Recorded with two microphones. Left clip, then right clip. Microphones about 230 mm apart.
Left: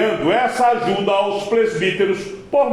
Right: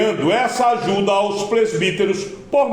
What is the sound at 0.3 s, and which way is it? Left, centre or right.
A man's voice, right.